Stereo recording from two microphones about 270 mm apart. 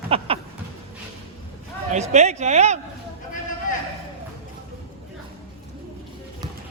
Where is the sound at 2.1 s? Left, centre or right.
Right.